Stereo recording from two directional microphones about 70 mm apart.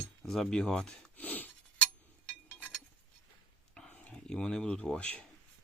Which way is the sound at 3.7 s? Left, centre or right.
Centre.